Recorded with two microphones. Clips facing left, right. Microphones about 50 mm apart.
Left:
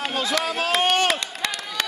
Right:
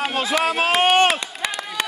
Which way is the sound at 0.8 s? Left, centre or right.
Right.